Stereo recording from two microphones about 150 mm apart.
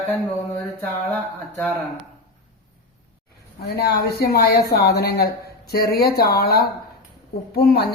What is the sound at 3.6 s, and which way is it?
Speech, 90° left.